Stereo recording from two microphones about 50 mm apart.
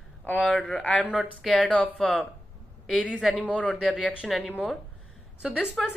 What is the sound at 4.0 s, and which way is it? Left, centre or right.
Speech, centre.